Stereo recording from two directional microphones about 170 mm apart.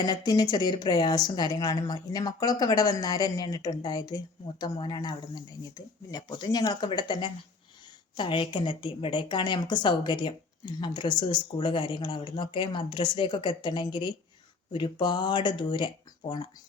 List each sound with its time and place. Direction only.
0.0 s a woman's voice: 20° left (ahead or behind)